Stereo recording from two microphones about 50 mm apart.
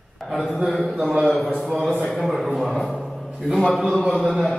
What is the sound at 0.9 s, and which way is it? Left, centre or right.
Speech, centre.